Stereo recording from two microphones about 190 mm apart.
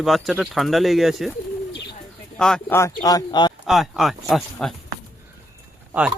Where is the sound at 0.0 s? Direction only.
Centre (ahead or behind).